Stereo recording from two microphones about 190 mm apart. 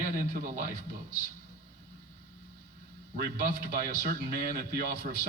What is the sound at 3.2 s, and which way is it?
A man's voice, 50° right (ahead or behind).